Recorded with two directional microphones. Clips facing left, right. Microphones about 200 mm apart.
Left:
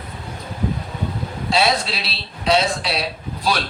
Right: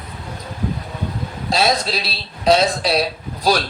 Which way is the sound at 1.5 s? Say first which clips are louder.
Right 1 dB; 40° right (ahead or behind).